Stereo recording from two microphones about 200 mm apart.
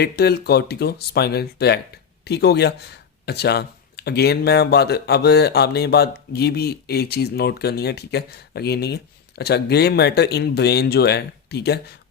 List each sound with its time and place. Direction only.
0.0 s speech: 55° left (ahead or behind)